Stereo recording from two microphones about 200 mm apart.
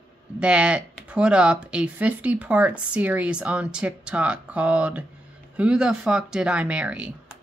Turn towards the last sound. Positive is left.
turn(degrees=-5)  # may be behind; listen again after turning